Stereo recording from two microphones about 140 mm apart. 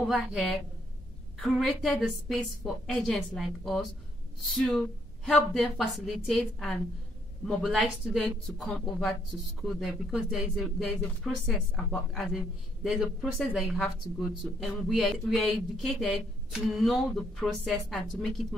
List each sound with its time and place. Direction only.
0.1 s a man's voice: centre (ahead or behind)